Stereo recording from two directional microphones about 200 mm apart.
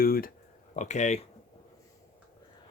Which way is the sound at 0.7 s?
35° left (ahead or behind).